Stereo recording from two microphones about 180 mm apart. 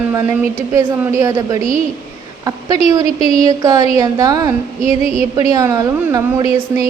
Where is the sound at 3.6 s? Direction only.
20° right (ahead or behind).